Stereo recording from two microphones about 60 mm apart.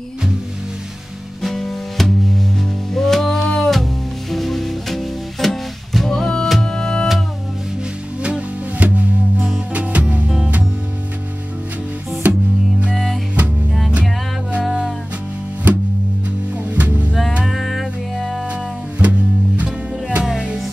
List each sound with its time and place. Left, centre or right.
1.4 s music: centre
8.2 s music: centre
12.2 s music: right
12.9 s music: centre
16.5 s music: right
17.5 s music: centre
18.5 s music: right